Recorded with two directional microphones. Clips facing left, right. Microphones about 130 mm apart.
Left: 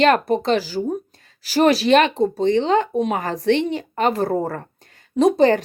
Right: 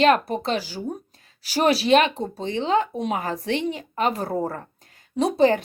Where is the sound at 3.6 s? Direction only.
35° left (ahead or behind).